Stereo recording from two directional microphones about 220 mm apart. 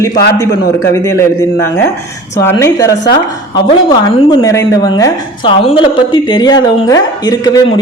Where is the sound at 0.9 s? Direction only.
15° left (ahead or behind).